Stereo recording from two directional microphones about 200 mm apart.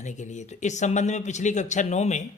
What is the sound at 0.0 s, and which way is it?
Speech, 35° left (ahead or behind).